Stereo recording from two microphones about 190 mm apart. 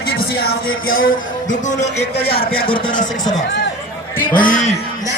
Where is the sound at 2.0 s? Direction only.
55° left (ahead or behind).